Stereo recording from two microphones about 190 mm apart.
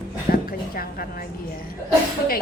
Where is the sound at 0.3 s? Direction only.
50° left (ahead or behind).